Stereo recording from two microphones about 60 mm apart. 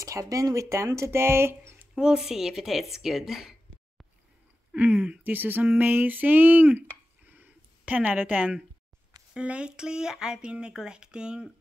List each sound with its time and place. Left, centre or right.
0.0 s speech: right
2.0 s speech: centre
4.7 s a sound: right
9.3 s speech: centre